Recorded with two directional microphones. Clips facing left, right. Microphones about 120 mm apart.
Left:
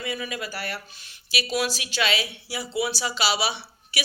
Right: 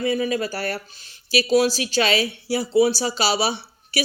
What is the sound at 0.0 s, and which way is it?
Speech, 35° right (ahead or behind).